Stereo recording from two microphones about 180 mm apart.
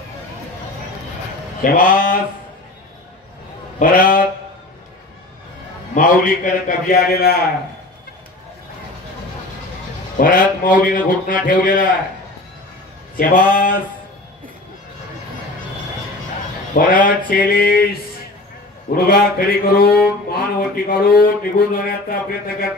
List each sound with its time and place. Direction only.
1.6 s a man's voice: 50° left (ahead or behind)
3.8 s speech: 50° left (ahead or behind)
5.9 s speech: 50° left (ahead or behind)
10.1 s a man's voice: 50° left (ahead or behind)
13.2 s a man's voice: 50° left (ahead or behind)
16.7 s a man's voice: 50° left (ahead or behind)
18.9 s speech: 55° left (ahead or behind)